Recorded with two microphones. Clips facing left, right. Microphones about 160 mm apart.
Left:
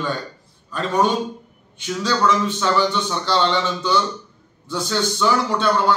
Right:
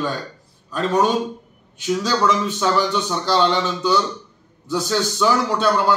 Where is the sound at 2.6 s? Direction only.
10° right (ahead or behind).